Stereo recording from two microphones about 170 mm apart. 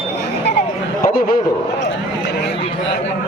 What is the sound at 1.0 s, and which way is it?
Speech, 60° left (ahead or behind).